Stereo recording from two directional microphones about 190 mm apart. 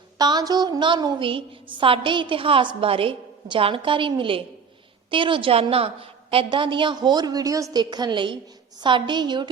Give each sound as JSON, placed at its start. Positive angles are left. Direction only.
{"t": 0.2, "sound": "a woman's voice", "side_deg": -20}